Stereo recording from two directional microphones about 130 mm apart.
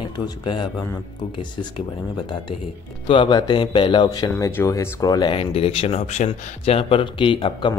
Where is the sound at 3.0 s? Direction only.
40° left (ahead or behind).